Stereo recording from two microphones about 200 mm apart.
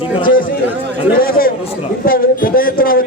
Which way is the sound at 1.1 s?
45° left (ahead or behind).